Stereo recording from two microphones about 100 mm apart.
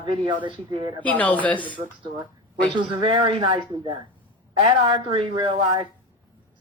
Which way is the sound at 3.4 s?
45° right (ahead or behind).